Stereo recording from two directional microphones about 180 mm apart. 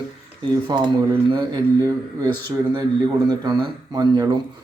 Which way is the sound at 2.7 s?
25° right (ahead or behind).